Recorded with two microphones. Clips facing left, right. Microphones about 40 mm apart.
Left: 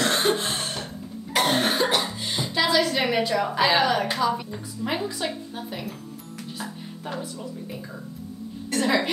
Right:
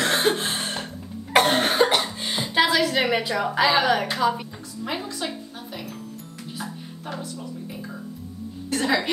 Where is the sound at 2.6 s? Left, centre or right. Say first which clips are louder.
Right 1 dB; centre.